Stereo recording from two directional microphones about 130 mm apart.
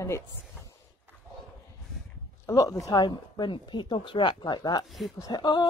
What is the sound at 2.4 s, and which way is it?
Speech, 25° left (ahead or behind).